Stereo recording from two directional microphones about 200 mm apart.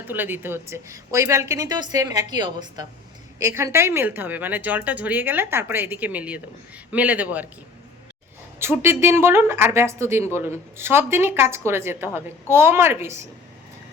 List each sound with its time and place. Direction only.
0.1 s speech: 10° right (ahead or behind)
8.5 s speech: 10° right (ahead or behind)